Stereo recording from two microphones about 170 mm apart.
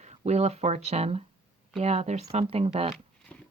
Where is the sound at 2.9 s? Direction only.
5° left (ahead or behind).